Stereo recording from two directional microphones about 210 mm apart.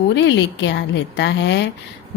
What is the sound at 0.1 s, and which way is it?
A woman's voice, 60° left (ahead or behind).